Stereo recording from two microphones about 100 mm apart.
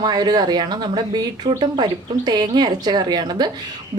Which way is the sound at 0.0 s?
45° right (ahead or behind).